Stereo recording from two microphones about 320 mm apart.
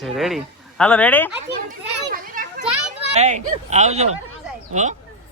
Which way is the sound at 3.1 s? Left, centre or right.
Right.